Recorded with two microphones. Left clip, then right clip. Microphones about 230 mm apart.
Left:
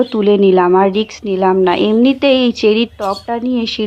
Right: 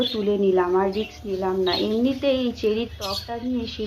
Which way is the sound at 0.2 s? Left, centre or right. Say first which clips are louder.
Left 12 dB; left.